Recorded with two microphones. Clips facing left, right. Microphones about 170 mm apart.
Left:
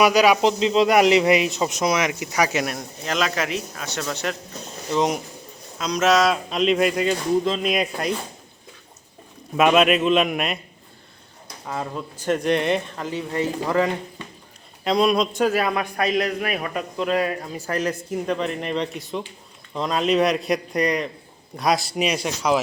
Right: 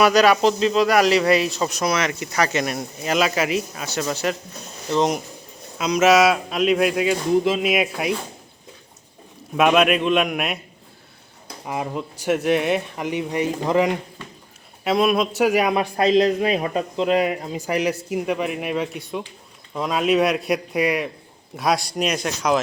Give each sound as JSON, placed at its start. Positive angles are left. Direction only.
{"t": 0.0, "sound": "speech", "side_deg": 10}
{"t": 2.7, "sound": "speech", "side_deg": -5}
{"t": 9.6, "sound": "speech", "side_deg": 0}
{"t": 11.6, "sound": "speech", "side_deg": -15}
{"t": 13.1, "sound": "speech", "side_deg": -15}
{"t": 14.8, "sound": "speech", "side_deg": 0}
{"t": 15.8, "sound": "a man's voice", "side_deg": -25}